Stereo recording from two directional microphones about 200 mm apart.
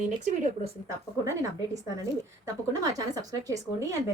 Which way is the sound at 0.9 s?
15° right (ahead or behind).